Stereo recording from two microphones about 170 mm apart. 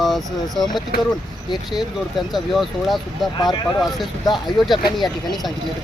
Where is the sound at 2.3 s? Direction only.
Centre (ahead or behind).